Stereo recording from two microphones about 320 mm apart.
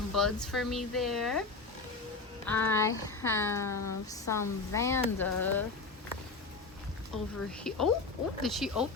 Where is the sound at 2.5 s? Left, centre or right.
Centre.